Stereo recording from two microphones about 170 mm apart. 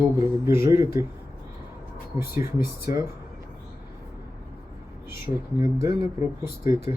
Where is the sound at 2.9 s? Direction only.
20° right (ahead or behind).